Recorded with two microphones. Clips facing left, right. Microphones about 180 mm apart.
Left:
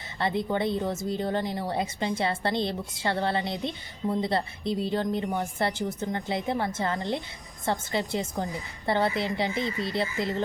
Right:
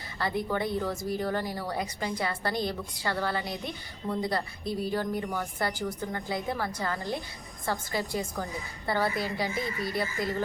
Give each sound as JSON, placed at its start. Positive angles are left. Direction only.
{"t": 0.2, "sound": "speech", "side_deg": 25}